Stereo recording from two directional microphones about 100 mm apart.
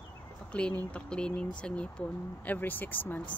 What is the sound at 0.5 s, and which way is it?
Speech, 10° left (ahead or behind).